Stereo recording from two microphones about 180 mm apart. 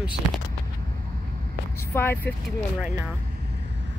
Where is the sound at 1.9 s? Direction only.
10° left (ahead or behind).